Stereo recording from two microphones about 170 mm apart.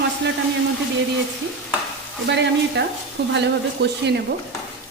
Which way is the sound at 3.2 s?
75° right (ahead or behind).